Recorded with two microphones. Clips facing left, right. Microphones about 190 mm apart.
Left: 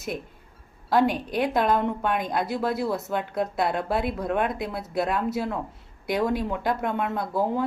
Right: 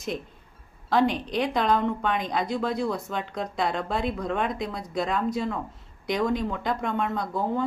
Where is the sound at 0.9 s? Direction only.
5° left (ahead or behind).